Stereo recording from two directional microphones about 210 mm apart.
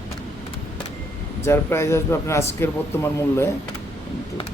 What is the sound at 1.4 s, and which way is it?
A man's voice, 10° left (ahead or behind).